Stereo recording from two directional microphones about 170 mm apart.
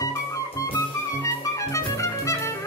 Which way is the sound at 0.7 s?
20° left (ahead or behind).